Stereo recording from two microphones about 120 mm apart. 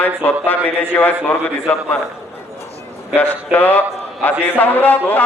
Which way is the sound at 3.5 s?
15° left (ahead or behind).